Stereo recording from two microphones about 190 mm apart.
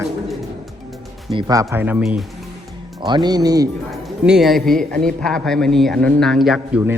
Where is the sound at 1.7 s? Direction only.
10° right (ahead or behind).